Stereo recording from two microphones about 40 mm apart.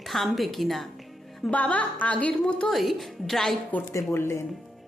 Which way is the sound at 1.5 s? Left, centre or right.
Left.